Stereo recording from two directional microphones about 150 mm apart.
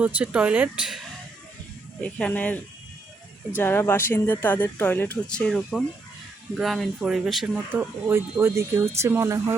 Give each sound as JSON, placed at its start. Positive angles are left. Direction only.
{"t": 0.0, "sound": "speech", "side_deg": -10}
{"t": 2.0, "sound": "speech", "side_deg": 5}
{"t": 3.6, "sound": "speech", "side_deg": 15}
{"t": 7.7, "sound": "speech", "side_deg": -15}